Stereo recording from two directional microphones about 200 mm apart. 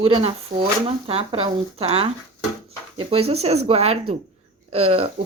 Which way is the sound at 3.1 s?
30° right (ahead or behind).